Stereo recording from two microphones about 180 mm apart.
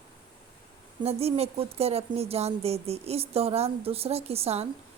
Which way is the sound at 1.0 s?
35° right (ahead or behind).